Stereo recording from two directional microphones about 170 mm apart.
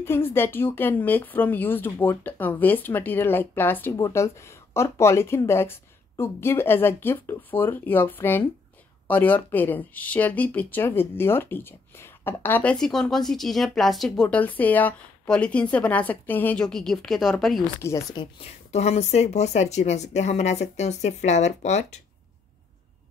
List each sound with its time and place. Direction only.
0.0 s speech: 15° left (ahead or behind)
17.8 s speech: 15° left (ahead or behind)
18.2 s speech: 40° left (ahead or behind)